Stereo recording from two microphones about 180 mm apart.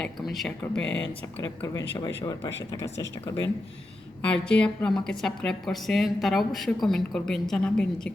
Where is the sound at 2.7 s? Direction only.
15° left (ahead or behind).